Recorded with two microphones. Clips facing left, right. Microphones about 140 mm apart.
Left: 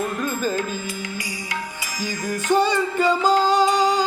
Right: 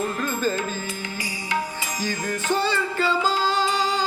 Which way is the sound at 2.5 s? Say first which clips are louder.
Left 5 dB; 15° left (ahead or behind).